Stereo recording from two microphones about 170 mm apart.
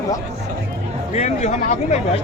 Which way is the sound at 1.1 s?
40° left (ahead or behind).